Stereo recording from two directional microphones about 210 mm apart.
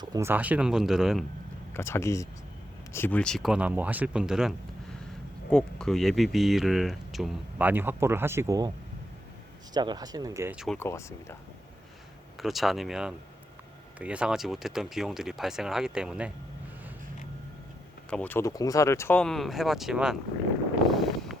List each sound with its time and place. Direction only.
0.0 s speech: 15° right (ahead or behind)
1.7 s speech: 10° left (ahead or behind); by 8.7 s 15° right (ahead or behind)
9.7 s speech: 20° right (ahead or behind)
10.8 s speech: 10° left (ahead or behind)
12.4 s speech: centre (ahead or behind)
18.1 s speech: 10° left (ahead or behind)
20.9 s a sound: centre (ahead or behind)